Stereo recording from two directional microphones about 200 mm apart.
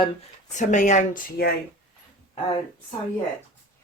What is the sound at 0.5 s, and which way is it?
Speech, 35° left (ahead or behind).